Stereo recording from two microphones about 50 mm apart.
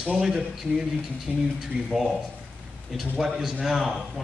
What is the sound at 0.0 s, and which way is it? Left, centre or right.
Speech, centre.